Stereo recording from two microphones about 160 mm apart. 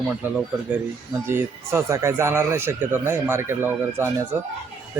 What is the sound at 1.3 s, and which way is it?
Speech, 15° right (ahead or behind).